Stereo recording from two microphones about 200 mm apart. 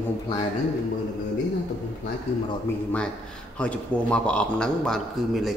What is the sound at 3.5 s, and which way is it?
A man's voice, 5° left (ahead or behind).